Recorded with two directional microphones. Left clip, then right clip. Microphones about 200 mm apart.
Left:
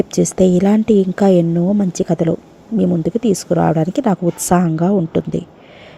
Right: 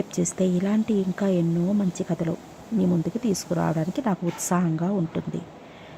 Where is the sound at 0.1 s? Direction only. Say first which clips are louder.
Left 12 dB; 20° left (ahead or behind).